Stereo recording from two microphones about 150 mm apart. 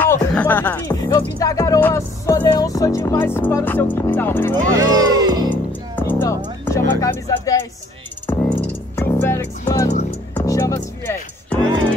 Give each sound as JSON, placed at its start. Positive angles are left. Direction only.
{"t": 0.0, "sound": "music", "side_deg": 10}
{"t": 0.8, "sound": "music", "side_deg": 25}
{"t": 1.8, "sound": "speech", "side_deg": 15}
{"t": 4.7, "sound": "speech", "side_deg": -25}
{"t": 5.9, "sound": "music", "side_deg": 15}
{"t": 8.3, "sound": "music", "side_deg": 10}